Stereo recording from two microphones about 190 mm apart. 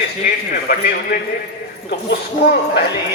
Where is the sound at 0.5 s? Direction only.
50° left (ahead or behind).